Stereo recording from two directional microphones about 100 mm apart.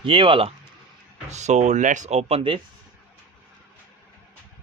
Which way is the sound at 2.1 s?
90° right.